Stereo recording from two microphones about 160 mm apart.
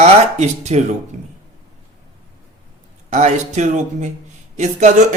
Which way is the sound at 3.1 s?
45° right (ahead or behind).